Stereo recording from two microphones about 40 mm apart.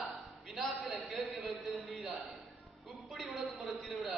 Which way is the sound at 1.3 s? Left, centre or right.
Right.